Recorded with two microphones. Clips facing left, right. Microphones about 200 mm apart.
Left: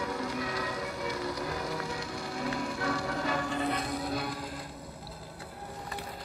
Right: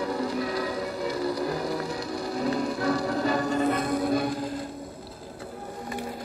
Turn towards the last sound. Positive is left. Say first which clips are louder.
# right 9 dB
turn(degrees=-50)  # may be behind; listen again after turning